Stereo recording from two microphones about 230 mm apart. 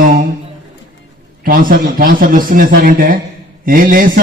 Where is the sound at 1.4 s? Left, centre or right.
Right.